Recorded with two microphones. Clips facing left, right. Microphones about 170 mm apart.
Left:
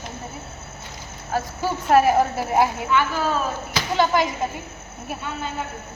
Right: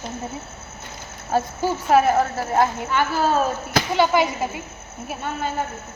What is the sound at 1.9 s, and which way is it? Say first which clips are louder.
Speech: left 1 dB; centre (ahead or behind).